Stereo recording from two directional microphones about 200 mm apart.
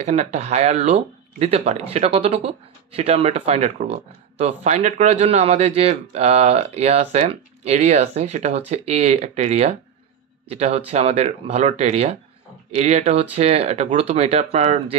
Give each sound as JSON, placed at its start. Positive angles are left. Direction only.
{"t": 0.0, "sound": "speech", "side_deg": -35}